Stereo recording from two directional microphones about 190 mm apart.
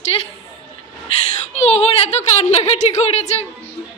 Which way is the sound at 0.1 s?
30° left (ahead or behind).